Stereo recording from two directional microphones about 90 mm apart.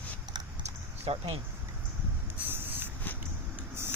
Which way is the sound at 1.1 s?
90° right.